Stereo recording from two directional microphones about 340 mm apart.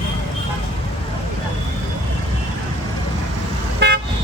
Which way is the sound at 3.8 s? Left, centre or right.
Right.